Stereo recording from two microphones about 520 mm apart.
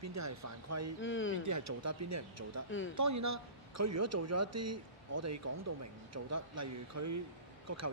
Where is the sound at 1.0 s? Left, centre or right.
Left.